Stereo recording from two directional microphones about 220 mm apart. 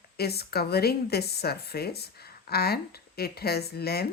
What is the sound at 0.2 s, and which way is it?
Speech, 45° left (ahead or behind).